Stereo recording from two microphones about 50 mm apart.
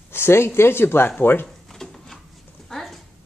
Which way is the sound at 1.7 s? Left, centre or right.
Centre.